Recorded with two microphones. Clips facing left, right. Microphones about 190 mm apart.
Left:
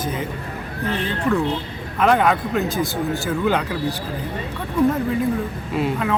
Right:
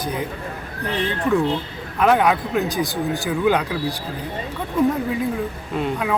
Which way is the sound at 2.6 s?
15° right (ahead or behind).